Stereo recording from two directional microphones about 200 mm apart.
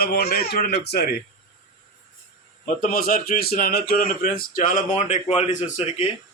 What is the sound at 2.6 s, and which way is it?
Speech, 45° left (ahead or behind).